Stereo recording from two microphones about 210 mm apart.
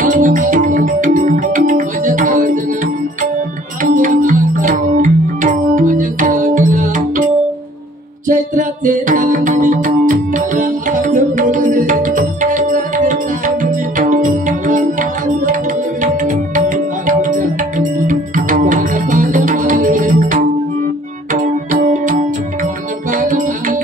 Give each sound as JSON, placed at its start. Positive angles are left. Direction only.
{"t": 0.0, "sound": "music", "side_deg": -40}
{"t": 3.9, "sound": "music", "side_deg": -40}
{"t": 8.3, "sound": "music", "side_deg": -40}
{"t": 23.1, "sound": "music", "side_deg": -40}